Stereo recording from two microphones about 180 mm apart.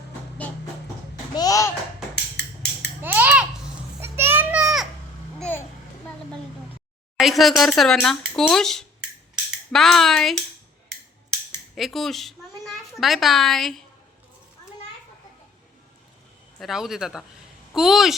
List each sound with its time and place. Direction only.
1.4 s a child's voice: 20° left (ahead or behind)
3.0 s babbling: 10° right (ahead or behind)
4.0 s children playing: 15° right (ahead or behind)
5.4 s a sound: 10° left (ahead or behind)
7.2 s speech: centre (ahead or behind)
11.7 s a sound: centre (ahead or behind)
13.0 s speech: centre (ahead or behind)
16.6 s speech: centre (ahead or behind)